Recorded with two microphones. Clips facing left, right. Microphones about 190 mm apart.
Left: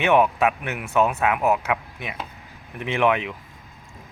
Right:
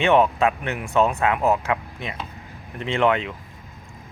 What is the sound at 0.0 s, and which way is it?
Speech, 10° left (ahead or behind).